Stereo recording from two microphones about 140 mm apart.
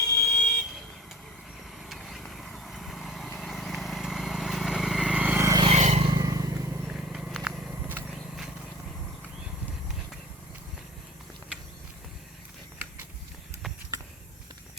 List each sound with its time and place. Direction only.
0.2 s vehicle: centre (ahead or behind)
1.8 s vehicle: centre (ahead or behind)
5.6 s vehicle: 55° right (ahead or behind)
6.1 s vehicle: 25° right (ahead or behind)
6.8 s purr: centre (ahead or behind)
7.9 s vehicle: 10° right (ahead or behind)